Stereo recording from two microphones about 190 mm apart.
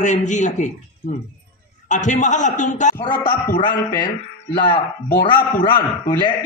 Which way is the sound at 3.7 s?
10° left (ahead or behind).